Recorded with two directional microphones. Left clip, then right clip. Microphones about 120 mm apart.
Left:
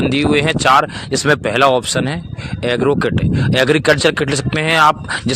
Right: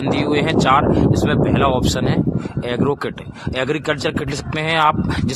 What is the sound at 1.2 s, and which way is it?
Speech, 45° left (ahead or behind).